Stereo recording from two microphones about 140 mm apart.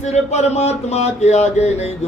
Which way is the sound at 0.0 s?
55° left (ahead or behind).